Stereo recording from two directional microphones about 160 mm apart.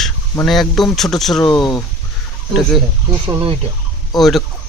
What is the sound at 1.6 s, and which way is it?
Speech, 25° left (ahead or behind).